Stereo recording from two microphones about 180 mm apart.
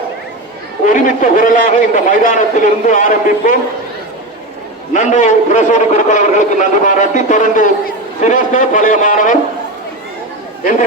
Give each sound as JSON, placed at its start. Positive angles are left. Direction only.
{"t": 0.9, "sound": "a man's voice", "side_deg": 50}
{"t": 4.9, "sound": "a man's voice", "side_deg": 45}
{"t": 10.6, "sound": "a man's voice", "side_deg": 50}